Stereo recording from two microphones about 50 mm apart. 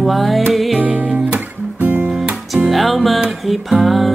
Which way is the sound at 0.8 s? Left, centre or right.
Right.